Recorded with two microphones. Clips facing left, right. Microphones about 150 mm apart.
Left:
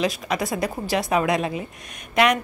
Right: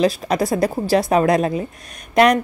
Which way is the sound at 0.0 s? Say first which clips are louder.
Right 6 dB; 35° right (ahead or behind).